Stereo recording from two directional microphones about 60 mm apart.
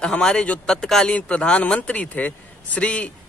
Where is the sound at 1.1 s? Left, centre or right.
Left.